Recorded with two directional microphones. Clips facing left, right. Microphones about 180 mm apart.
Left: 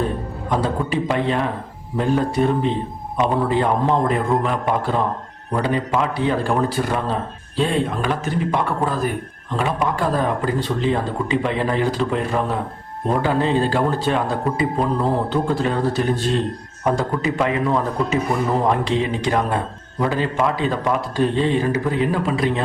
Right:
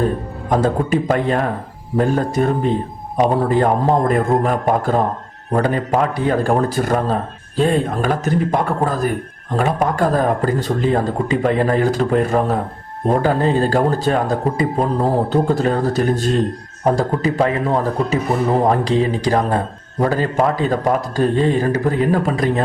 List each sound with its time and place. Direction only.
0.5 s speech: 45° right (ahead or behind)